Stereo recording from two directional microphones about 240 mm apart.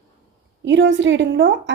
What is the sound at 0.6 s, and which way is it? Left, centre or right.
A woman's voice, right.